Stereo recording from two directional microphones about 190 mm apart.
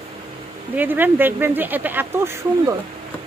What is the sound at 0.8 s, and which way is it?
Speech, 10° right (ahead or behind).